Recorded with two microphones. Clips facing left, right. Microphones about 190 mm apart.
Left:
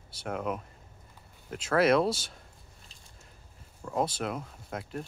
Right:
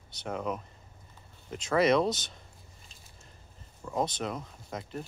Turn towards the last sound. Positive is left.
turn(degrees=5)  # may be behind; listen again after turning